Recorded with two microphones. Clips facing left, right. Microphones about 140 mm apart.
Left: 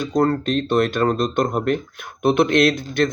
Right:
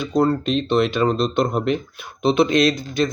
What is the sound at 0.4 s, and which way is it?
Speech, 50° left (ahead or behind).